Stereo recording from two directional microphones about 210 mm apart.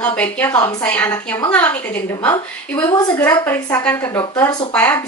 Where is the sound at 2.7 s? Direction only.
20° left (ahead or behind).